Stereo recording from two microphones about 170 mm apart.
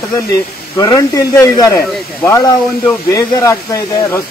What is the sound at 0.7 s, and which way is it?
Speech, 20° left (ahead or behind).